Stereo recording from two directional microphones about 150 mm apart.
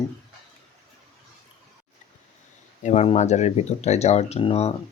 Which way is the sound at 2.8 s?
50° left (ahead or behind).